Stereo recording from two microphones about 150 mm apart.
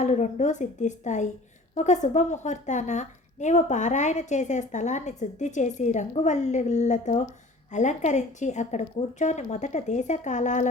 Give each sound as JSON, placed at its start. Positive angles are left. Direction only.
{"t": 0.0, "sound": "speech", "side_deg": 50}